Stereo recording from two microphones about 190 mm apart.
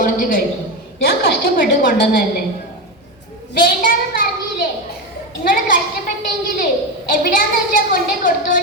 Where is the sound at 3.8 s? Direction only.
45° left (ahead or behind).